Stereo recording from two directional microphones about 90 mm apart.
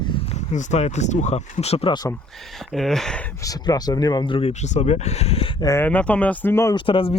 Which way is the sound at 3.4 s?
45° left (ahead or behind).